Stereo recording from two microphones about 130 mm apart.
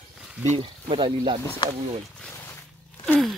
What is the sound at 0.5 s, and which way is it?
Speech, 40° right (ahead or behind).